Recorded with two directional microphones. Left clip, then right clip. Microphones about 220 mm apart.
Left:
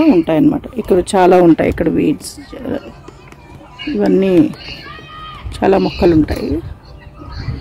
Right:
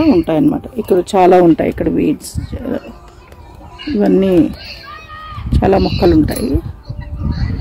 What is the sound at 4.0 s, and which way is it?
Speech, centre (ahead or behind).